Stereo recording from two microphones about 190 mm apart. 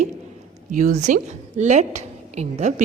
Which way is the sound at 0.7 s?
40° right (ahead or behind).